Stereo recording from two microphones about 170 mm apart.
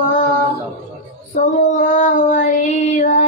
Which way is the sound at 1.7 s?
45° left (ahead or behind).